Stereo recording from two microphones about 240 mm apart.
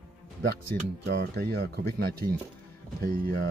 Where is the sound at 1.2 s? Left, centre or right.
Right.